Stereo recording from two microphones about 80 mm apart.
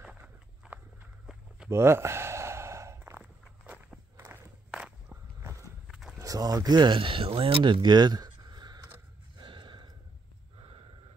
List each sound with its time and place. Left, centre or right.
0.0 s walk: centre
1.7 s sigh: right
3.0 s walk: right
5.9 s walk: centre
6.1 s speech: right
9.4 s gasp: right